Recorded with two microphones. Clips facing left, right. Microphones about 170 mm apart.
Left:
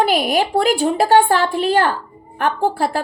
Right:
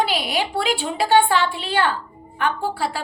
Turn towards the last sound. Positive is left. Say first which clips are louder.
# left 6 dB
turn(degrees=45)  # may be behind; listen again after turning